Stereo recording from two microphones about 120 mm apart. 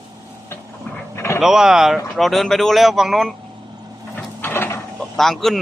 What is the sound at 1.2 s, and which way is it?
Vehicle, 20° left (ahead or behind).